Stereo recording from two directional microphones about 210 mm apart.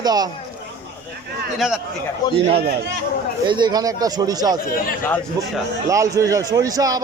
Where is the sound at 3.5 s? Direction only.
20° right (ahead or behind).